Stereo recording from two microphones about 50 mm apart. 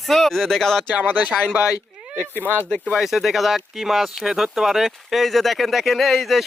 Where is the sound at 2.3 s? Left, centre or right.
Left.